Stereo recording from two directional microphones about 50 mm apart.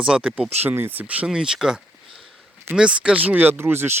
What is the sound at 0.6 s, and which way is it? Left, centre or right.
Speech, right.